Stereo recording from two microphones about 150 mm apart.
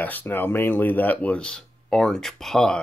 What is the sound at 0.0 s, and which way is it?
Speech, 10° left (ahead or behind).